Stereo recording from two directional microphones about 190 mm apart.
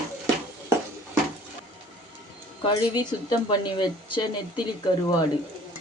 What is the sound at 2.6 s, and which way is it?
Speech, 25° left (ahead or behind).